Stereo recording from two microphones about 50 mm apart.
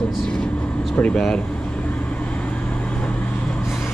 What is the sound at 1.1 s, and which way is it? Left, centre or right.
Speech, centre.